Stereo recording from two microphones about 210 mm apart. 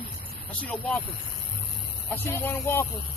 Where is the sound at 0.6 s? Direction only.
5° left (ahead or behind).